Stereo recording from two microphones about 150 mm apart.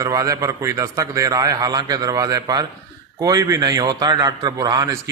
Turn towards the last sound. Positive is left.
turn(degrees=-25)  # may be behind; listen again after turning